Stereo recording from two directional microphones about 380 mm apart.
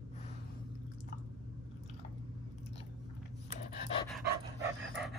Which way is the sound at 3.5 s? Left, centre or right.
Centre.